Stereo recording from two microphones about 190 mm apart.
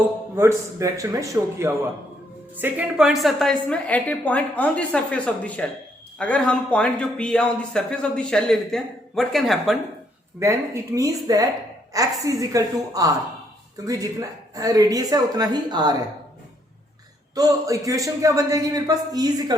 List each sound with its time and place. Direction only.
0.3 s a woman's voice: 15° right (ahead or behind); by 9.7 s centre (ahead or behind)
10.4 s a man's voice: 15° right (ahead or behind)
17.3 s a man's voice: 20° right (ahead or behind)